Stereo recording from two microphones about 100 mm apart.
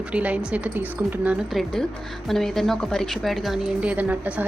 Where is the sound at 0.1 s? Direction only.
15° right (ahead or behind).